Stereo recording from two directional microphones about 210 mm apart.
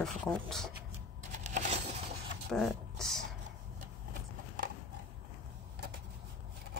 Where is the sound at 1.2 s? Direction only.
35° right (ahead or behind).